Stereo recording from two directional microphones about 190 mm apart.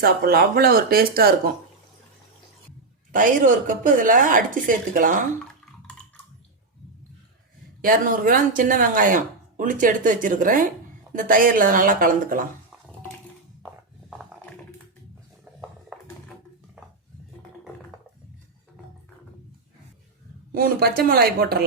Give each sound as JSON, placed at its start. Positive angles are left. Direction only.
{"t": 0.0, "sound": "speech", "side_deg": -55}
{"t": 3.1, "sound": "speech", "side_deg": -45}
{"t": 7.8, "sound": "speech", "side_deg": -45}
{"t": 20.5, "sound": "speech", "side_deg": -50}